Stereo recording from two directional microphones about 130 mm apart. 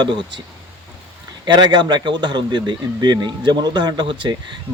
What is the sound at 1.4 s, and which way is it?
A man's voice, 35° right (ahead or behind).